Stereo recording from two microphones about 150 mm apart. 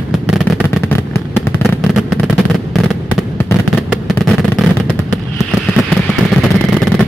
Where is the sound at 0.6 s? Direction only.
15° left (ahead or behind).